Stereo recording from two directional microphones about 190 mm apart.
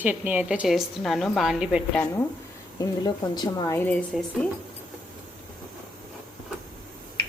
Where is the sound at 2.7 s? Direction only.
20° left (ahead or behind); by 4.4 s 5° left (ahead or behind).